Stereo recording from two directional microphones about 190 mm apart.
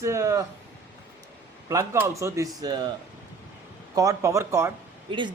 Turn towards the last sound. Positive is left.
turn(degrees=-25)  # may be behind; listen again after turning